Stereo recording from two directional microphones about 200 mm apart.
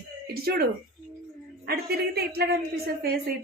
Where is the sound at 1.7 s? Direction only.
50° right (ahead or behind).